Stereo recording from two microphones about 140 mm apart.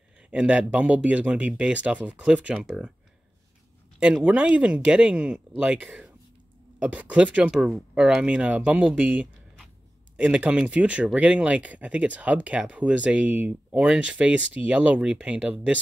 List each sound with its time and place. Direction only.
0.3 s speech: 10° right (ahead or behind)
4.0 s speech: 5° right (ahead or behind)